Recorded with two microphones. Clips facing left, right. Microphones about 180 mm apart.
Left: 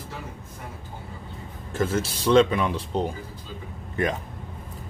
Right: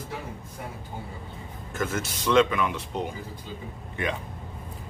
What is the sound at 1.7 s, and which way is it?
Speech, 30° left (ahead or behind).